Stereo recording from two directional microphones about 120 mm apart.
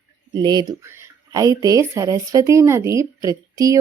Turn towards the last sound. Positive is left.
turn(degrees=-30)  # may be behind; listen again after turning